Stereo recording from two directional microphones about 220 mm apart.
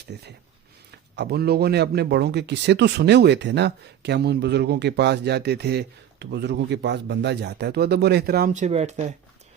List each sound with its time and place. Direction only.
0.1 s speech: 50° right (ahead or behind); by 9.1 s 30° right (ahead or behind)